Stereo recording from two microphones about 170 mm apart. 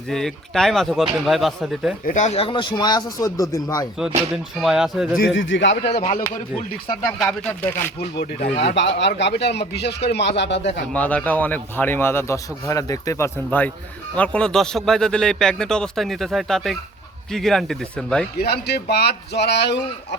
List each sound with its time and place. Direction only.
0.1 s a man's voice: centre (ahead or behind)
2.0 s speech: 45° left (ahead or behind); by 3.8 s 20° left (ahead or behind)
4.5 s a man's voice: centre (ahead or behind)
5.1 s speech: 75° left (ahead or behind)
7.2 s a man's voice: 10° left (ahead or behind)
8.6 s speech: 90° left
10.1 s speech: 85° left
10.9 s a man's voice: 10° left (ahead or behind)
18.3 s speech: 70° left (ahead or behind)